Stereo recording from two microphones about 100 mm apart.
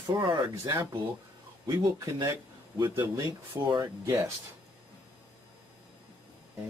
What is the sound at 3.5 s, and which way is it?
Speech, 50° right (ahead or behind).